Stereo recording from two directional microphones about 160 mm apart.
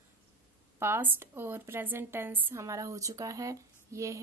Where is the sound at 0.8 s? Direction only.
15° right (ahead or behind).